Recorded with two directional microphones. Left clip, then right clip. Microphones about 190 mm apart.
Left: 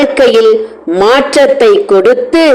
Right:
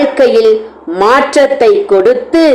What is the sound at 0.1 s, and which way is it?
A man's voice, 25° left (ahead or behind).